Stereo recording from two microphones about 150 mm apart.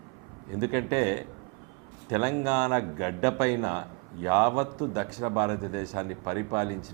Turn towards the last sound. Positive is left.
turn(degrees=-20)  # may be behind; listen again after turning